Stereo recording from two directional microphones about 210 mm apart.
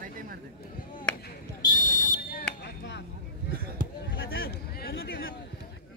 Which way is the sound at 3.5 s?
45° right (ahead or behind).